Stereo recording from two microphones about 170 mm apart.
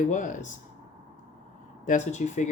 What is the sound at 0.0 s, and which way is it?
Speech, 45° left (ahead or behind).